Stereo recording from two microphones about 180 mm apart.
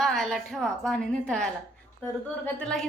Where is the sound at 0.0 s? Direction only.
Centre (ahead or behind).